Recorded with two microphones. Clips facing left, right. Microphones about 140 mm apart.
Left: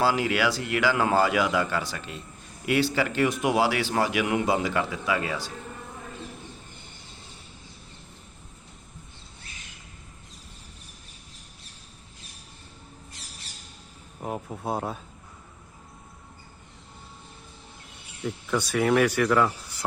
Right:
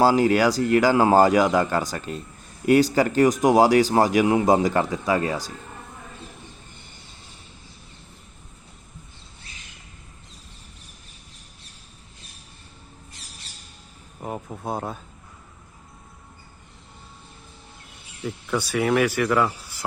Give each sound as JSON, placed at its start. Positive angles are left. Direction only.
{"t": 0.0, "sound": "speech", "side_deg": -40}
{"t": 14.2, "sound": "speech", "side_deg": 0}
{"t": 18.2, "sound": "speech", "side_deg": -5}